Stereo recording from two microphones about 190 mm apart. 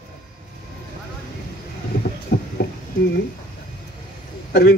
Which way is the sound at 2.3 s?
55° left (ahead or behind).